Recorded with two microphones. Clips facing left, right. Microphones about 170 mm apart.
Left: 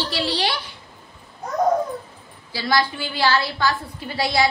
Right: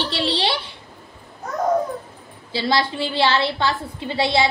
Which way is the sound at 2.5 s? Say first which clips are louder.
Right 1 dB; 25° right (ahead or behind).